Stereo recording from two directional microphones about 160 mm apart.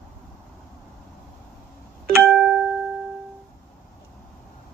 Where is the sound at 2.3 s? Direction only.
Centre (ahead or behind).